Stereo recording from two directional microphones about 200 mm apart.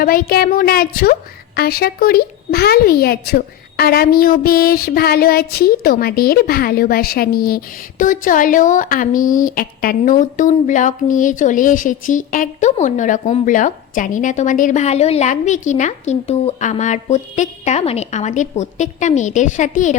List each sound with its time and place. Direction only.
0.0 s speech: 45° left (ahead or behind)